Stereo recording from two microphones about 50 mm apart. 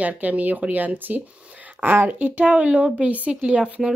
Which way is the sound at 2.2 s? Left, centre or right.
Right.